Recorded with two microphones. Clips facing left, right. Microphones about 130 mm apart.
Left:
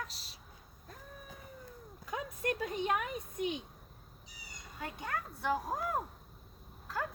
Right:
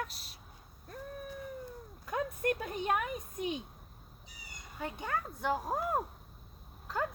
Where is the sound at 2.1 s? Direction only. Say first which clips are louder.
Right 4 dB; 55° right (ahead or behind).